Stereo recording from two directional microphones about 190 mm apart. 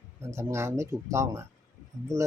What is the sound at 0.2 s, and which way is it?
Speech, 15° right (ahead or behind).